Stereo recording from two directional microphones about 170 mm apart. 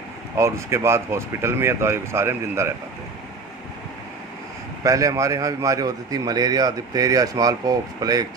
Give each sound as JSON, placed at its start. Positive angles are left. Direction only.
{"t": 0.3, "sound": "speech", "side_deg": -15}
{"t": 4.8, "sound": "a man's voice", "side_deg": -20}